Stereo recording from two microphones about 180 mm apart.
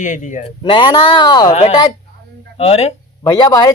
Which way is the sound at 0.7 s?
25° left (ahead or behind).